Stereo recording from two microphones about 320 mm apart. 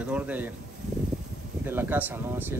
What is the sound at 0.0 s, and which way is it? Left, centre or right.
Speech, centre.